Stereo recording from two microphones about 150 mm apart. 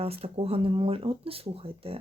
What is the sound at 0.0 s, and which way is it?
Speech, 40° right (ahead or behind).